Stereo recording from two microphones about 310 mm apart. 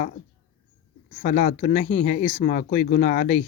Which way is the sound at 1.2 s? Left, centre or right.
Left.